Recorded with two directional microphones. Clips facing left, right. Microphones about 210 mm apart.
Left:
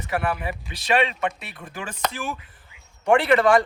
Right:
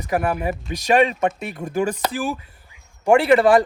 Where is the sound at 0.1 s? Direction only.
40° right (ahead or behind).